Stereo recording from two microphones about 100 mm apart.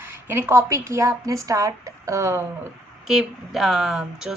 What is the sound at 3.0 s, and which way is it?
Speech, 5° right (ahead or behind).